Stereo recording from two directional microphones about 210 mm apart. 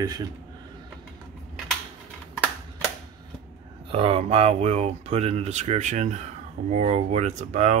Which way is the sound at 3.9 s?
25° right (ahead or behind).